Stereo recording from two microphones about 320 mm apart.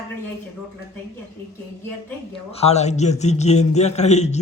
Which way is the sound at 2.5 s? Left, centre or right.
Centre.